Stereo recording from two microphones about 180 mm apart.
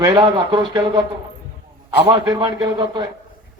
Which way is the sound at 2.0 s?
25° right (ahead or behind).